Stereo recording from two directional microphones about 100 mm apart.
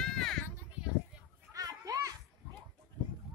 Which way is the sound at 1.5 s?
35° right (ahead or behind).